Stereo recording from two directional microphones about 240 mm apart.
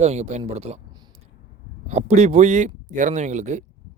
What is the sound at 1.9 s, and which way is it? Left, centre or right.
Speech, right.